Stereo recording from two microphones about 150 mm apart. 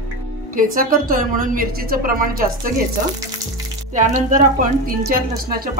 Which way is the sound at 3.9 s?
55° right (ahead or behind).